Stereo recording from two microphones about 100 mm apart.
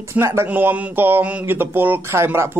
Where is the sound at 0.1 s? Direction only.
25° right (ahead or behind).